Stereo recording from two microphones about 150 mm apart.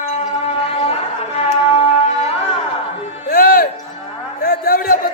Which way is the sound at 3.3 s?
75° left (ahead or behind).